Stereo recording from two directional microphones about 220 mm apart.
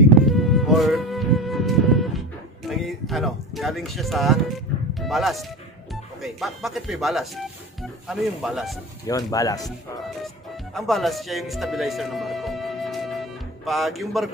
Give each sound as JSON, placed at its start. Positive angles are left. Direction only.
{"t": 0.3, "sound": "music", "side_deg": 0}
{"t": 2.7, "sound": "a sound", "side_deg": 0}
{"t": 4.9, "sound": "speech", "side_deg": 0}
{"t": 9.0, "sound": "speech", "side_deg": 15}
{"t": 10.2, "sound": "music", "side_deg": 0}
{"t": 13.7, "sound": "speech", "side_deg": 0}